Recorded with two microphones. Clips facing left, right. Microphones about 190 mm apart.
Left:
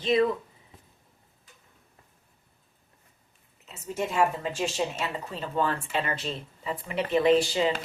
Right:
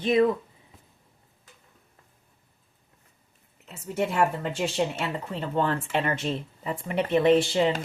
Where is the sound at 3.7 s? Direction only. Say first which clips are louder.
Right 3 dB; 60° right (ahead or behind).